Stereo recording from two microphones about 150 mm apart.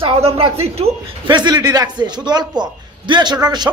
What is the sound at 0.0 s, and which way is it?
Speech, 40° right (ahead or behind).